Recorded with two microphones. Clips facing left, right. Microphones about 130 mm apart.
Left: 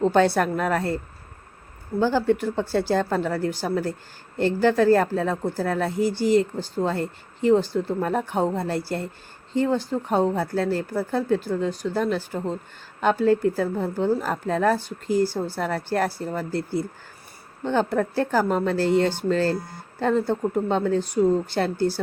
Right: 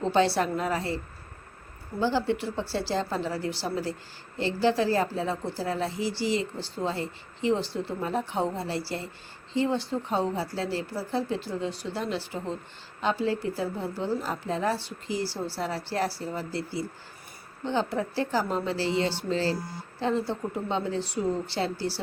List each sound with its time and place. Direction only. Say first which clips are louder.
0.0 s speech: left 5 dB; 50° left (ahead or behind)
2.0 s speech: left 5 dB; 50° left (ahead or behind)